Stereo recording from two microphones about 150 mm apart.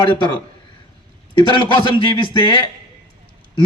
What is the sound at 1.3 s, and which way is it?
A man's voice, 30° left (ahead or behind).